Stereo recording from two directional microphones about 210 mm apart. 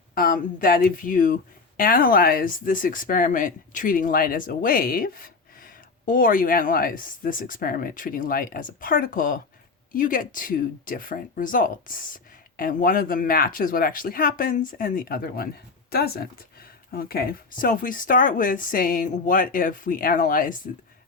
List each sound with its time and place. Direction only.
0.1 s speech: 40° left (ahead or behind)